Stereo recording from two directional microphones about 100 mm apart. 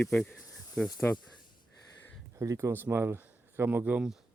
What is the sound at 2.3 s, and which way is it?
Speech, 30° right (ahead or behind).